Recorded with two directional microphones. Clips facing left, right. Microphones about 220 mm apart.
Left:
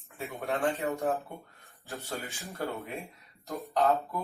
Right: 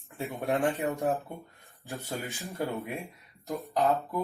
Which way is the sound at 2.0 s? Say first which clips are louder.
Right 3 dB; 15° right (ahead or behind).